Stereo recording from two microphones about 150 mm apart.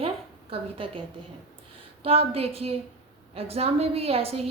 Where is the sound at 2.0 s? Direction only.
40° right (ahead or behind).